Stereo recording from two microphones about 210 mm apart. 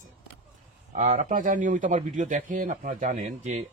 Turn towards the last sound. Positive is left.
turn(degrees=-30)  # may be behind; listen again after turning